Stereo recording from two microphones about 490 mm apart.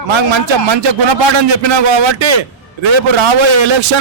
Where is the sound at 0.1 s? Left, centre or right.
Right.